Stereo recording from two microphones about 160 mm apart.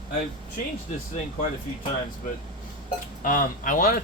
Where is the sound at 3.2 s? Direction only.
55° left (ahead or behind).